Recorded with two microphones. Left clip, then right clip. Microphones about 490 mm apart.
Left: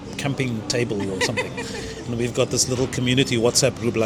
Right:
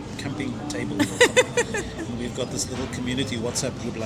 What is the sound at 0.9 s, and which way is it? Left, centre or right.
Speech, right.